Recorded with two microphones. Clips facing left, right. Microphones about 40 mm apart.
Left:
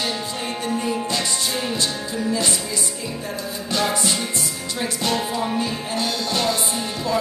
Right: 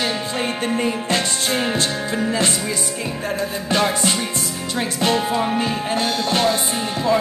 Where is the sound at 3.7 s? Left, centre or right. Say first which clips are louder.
Right 2 dB; right.